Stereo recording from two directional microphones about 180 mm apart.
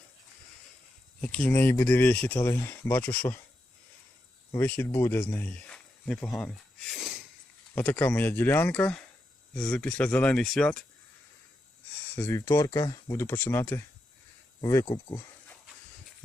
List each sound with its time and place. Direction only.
1.2 s speech: 5° left (ahead or behind)
4.5 s speech: 10° left (ahead or behind)
6.4 s a sound: centre (ahead or behind)
7.8 s speech: 10° left (ahead or behind)
12.1 s speech: 15° left (ahead or behind)